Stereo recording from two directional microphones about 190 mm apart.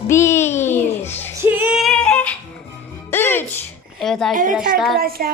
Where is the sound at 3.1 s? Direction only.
10° left (ahead or behind).